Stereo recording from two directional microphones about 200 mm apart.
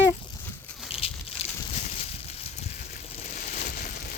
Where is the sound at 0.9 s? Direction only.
30° left (ahead or behind).